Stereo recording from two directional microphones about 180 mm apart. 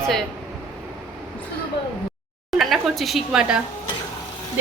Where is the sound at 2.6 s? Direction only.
Centre (ahead or behind).